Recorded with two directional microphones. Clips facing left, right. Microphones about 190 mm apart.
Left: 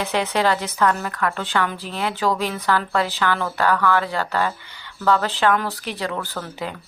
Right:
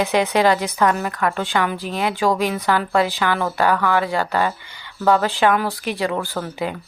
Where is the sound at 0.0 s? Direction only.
15° right (ahead or behind).